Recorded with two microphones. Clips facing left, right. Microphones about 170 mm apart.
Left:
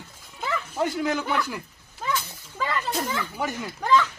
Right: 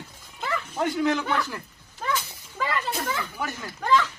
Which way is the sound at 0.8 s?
5° left (ahead or behind).